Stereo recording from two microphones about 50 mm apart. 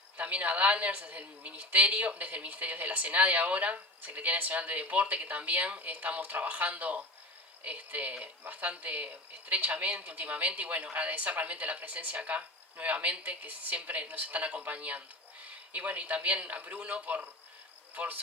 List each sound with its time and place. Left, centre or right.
0.2 s a man's voice: right
17.9 s insect: right